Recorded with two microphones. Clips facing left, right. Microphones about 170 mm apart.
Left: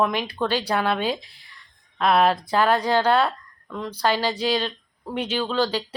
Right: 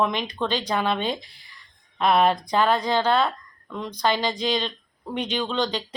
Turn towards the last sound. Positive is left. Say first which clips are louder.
# left 2 dB
turn(degrees=5)  # may be behind; listen again after turning